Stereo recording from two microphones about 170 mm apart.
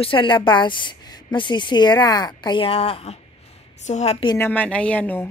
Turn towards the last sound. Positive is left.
turn(degrees=10)  # may be behind; listen again after turning